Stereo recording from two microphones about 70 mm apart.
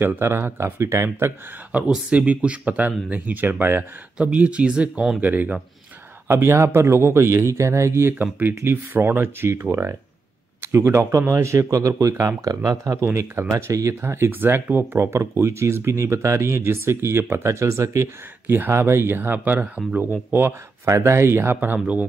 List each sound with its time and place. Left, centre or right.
0.0 s speech: right
1.9 s speech: centre
4.2 s speech: centre
5.2 s speech: right
6.2 s speech: right
8.2 s a man's voice: right
20.8 s speech: right